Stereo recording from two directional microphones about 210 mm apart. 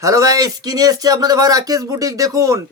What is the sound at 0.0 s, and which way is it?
Speech, 15° right (ahead or behind).